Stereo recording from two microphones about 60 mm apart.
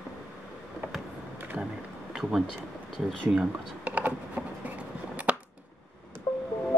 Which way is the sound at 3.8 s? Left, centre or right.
Right.